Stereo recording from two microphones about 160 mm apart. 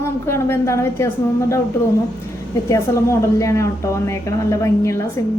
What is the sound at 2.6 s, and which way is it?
A woman's voice, 20° left (ahead or behind).